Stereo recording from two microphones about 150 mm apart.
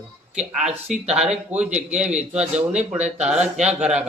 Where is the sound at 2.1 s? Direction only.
50° right (ahead or behind).